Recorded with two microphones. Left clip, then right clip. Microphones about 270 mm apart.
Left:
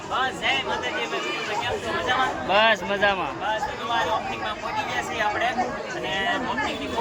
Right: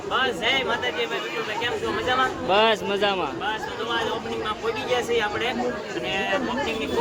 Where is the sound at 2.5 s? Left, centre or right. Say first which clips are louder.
Left 1 dB; centre.